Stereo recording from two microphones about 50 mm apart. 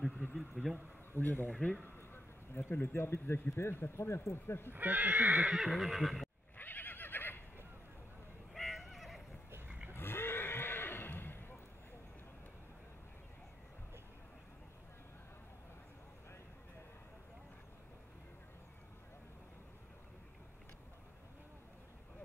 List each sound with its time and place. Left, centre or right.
0.3 s speech: centre
1.1 s speech: left
1.5 s speech: centre
2.0 s a sound: left
2.7 s speech: left
4.6 s speech: right
5.6 s neigh: centre
6.5 s neigh: left
8.5 s neigh: centre
9.9 s neigh: left